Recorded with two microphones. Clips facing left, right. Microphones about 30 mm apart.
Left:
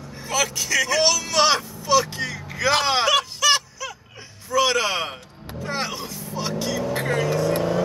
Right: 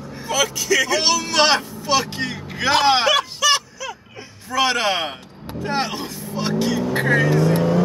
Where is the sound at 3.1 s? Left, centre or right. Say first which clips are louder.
Right 1 dB; centre.